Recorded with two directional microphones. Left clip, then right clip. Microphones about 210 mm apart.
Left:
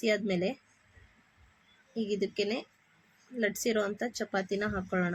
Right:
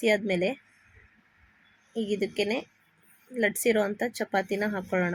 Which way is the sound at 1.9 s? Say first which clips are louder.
Right 3 dB; 20° right (ahead or behind).